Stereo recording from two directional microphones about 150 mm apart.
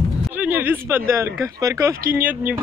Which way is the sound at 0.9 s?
20° right (ahead or behind).